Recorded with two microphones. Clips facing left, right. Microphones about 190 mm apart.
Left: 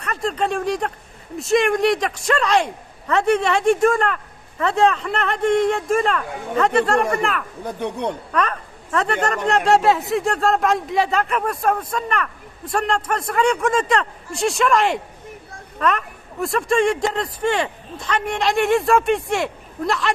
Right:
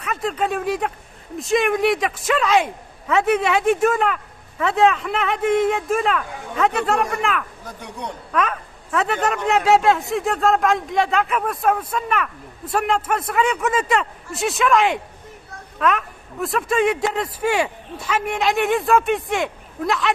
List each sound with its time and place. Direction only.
0.0 s a man's voice: centre (ahead or behind)
7.6 s speech: 60° left (ahead or behind)
8.3 s a man's voice: centre (ahead or behind)